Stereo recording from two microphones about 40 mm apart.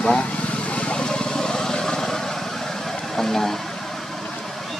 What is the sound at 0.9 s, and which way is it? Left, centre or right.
Vehicle, left.